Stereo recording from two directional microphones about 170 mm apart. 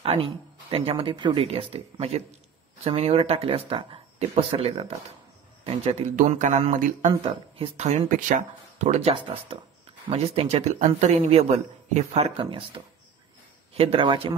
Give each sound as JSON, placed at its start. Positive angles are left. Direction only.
{"t": 0.0, "sound": "speech", "side_deg": -35}